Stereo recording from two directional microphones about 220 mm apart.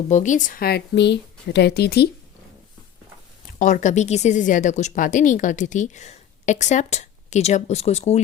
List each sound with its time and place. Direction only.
0.1 s speech: 35° left (ahead or behind)
3.6 s speech: 35° left (ahead or behind)